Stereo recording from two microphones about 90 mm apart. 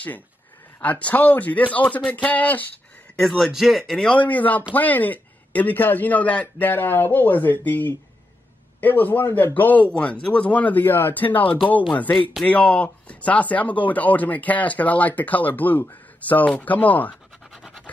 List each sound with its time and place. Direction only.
0.7 s speech: 15° left (ahead or behind)
3.3 s speech: centre (ahead or behind); by 17.1 s 15° left (ahead or behind)